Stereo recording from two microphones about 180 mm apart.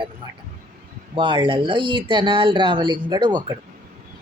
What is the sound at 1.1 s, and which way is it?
Speech, 25° right (ahead or behind).